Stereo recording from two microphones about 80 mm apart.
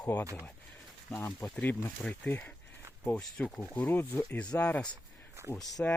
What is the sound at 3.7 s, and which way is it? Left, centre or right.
Speech, left.